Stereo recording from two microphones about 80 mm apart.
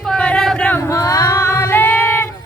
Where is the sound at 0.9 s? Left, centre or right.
Left.